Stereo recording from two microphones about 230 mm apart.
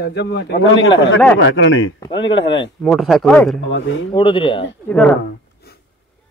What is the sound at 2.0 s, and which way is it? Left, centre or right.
Speech, left.